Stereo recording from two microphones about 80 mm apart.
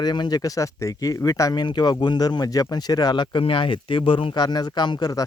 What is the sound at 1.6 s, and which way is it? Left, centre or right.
Speech, left.